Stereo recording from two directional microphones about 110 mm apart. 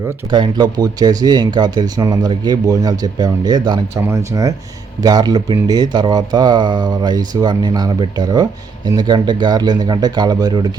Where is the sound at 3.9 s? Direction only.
25° right (ahead or behind).